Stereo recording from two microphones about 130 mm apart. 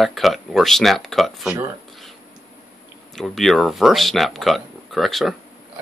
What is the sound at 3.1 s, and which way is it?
Speech, centre (ahead or behind).